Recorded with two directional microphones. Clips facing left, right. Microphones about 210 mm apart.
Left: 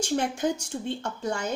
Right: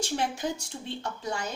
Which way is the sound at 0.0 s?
50° left (ahead or behind).